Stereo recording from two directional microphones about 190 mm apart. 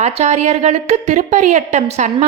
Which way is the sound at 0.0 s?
35° right (ahead or behind).